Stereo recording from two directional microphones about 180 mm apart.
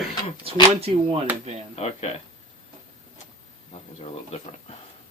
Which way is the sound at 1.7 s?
35° left (ahead or behind).